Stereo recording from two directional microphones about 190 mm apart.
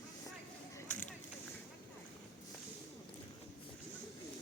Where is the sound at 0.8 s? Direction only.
10° left (ahead or behind).